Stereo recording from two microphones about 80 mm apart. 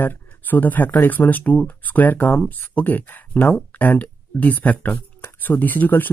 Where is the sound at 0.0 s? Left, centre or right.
Left.